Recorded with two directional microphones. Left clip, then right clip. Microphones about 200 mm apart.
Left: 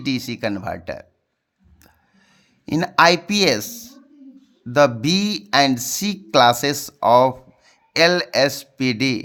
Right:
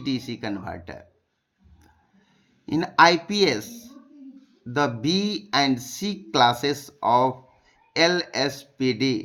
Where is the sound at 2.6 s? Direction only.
50° left (ahead or behind).